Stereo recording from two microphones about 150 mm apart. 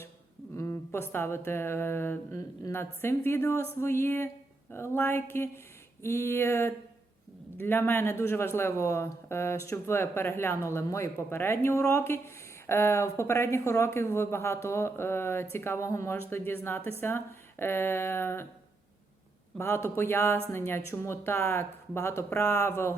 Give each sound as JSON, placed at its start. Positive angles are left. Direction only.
{"t": 0.5, "sound": "speech", "side_deg": 15}
{"t": 19.5, "sound": "speech", "side_deg": 15}